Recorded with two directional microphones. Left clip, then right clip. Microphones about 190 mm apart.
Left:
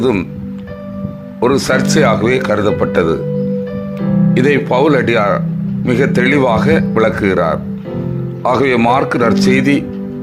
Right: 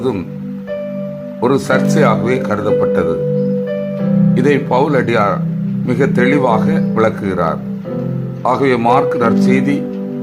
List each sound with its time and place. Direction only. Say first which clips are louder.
1.4 s speech: left 1 dB; 15° left (ahead or behind)
4.4 s speech: left 2 dB; 20° left (ahead or behind)